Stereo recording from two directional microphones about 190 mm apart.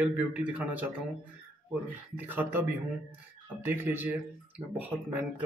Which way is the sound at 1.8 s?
10° right (ahead or behind).